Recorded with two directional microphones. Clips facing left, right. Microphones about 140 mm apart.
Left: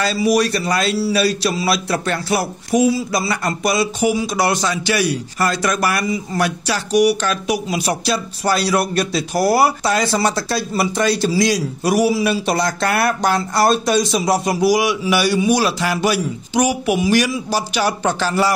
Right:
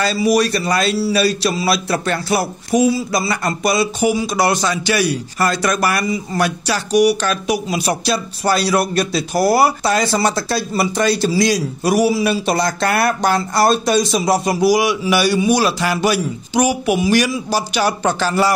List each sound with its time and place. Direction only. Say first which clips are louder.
0.0 s speech: right 1 dB; 35° right (ahead or behind)